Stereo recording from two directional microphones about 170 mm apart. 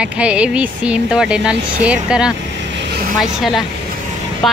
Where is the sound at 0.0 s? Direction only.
5° right (ahead or behind).